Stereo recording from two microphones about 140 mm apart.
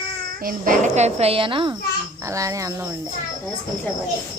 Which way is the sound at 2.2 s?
20° right (ahead or behind).